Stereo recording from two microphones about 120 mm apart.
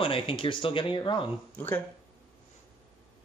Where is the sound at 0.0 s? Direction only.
45° left (ahead or behind).